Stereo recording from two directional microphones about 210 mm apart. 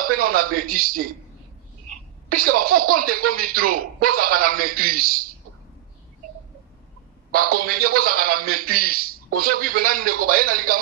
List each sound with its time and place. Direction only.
0.0 s a man's voice: 45° right (ahead or behind)
2.2 s a man's voice: 45° right (ahead or behind)
7.2 s a man's voice: 45° right (ahead or behind)